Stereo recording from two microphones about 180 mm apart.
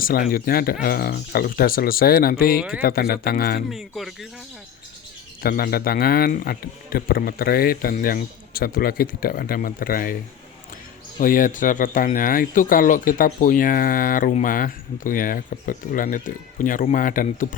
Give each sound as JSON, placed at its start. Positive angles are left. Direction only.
{"t": 0.0, "sound": "a man's voice", "side_deg": 55}
{"t": 2.6, "sound": "speech", "side_deg": -5}
{"t": 2.8, "sound": "a man's voice", "side_deg": 55}
{"t": 3.7, "sound": "speech", "side_deg": 0}
{"t": 5.4, "sound": "a man's voice", "side_deg": 55}
{"t": 11.2, "sound": "speech", "side_deg": 50}